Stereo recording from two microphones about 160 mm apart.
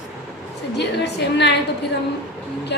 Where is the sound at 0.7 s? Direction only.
90° left.